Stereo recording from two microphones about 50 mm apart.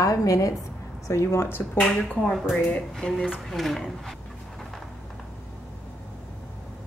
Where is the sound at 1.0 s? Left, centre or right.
Left.